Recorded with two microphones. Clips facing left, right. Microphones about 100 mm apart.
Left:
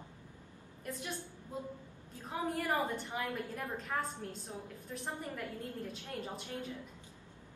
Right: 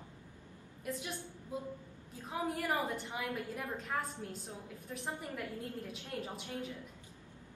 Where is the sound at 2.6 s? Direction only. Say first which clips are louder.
Left 1 dB; 5° right (ahead or behind).